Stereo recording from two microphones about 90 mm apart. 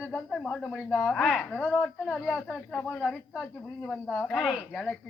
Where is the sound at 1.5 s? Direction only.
15° left (ahead or behind).